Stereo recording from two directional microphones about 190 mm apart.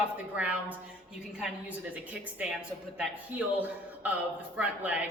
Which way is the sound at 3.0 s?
10° right (ahead or behind).